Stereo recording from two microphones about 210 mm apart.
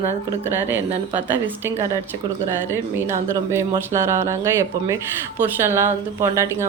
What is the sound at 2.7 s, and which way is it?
Speech, 10° right (ahead or behind).